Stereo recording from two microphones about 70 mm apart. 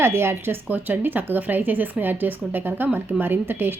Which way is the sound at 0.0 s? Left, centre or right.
Right.